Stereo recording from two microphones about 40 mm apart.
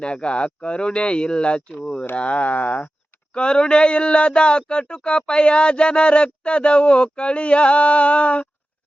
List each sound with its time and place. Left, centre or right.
0.0 s speech: left
3.3 s speech: left